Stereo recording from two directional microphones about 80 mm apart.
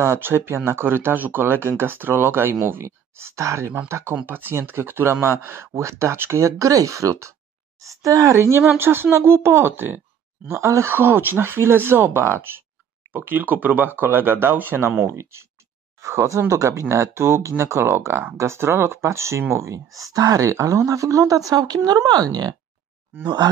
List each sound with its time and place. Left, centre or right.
0.0 s speech: right
8.4 s speech: right
23.2 s speech: right